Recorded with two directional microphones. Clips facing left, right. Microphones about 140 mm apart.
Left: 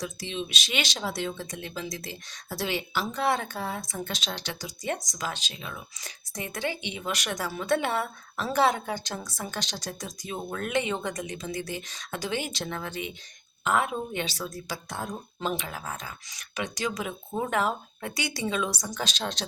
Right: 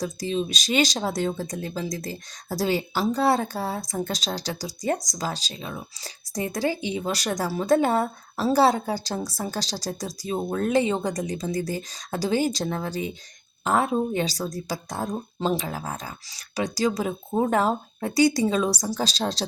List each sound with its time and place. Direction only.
0.0 s speech: 40° right (ahead or behind)